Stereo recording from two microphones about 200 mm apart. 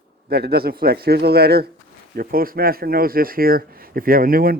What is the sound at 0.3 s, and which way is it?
Speech, 55° right (ahead or behind).